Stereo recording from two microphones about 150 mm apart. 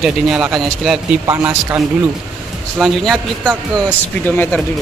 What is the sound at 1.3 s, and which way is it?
Speech, 20° right (ahead or behind).